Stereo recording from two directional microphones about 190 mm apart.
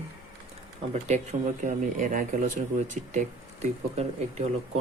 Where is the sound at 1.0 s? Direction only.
35° right (ahead or behind).